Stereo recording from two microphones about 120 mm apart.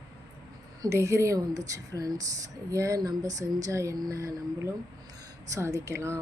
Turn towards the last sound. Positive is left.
turn(degrees=-25)  # may be behind; listen again after turning